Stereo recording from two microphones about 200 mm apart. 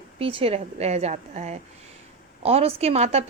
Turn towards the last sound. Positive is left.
turn(degrees=-30)  # may be behind; listen again after turning